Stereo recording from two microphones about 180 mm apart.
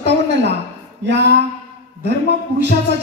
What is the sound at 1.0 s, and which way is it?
Speech, 75° right (ahead or behind).